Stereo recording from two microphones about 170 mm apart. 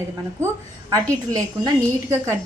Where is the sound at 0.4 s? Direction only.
20° right (ahead or behind).